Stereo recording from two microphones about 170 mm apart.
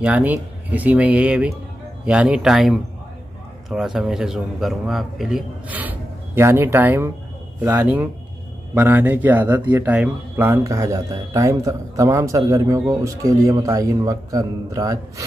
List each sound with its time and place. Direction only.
0.0 s a man's voice: 10° right (ahead or behind)